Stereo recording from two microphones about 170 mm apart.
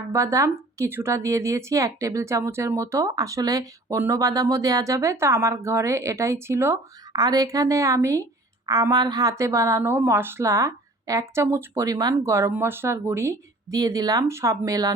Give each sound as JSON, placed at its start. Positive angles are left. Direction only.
{"t": 0.1, "sound": "a woman's voice", "side_deg": -15}